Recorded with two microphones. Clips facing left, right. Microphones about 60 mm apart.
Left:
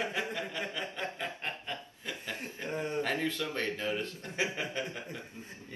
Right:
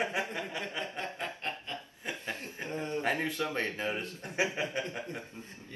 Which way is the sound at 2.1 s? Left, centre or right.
Right.